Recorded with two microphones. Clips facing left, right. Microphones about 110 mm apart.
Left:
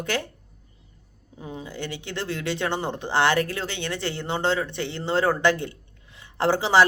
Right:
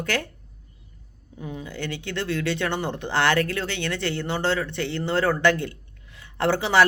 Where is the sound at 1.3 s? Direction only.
25° left (ahead or behind).